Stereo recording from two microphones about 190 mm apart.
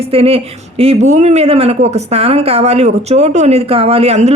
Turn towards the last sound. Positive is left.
turn(degrees=-35)  # may be behind; listen again after turning